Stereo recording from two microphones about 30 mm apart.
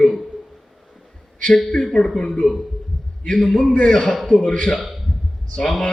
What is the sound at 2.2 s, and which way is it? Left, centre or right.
Speech, left.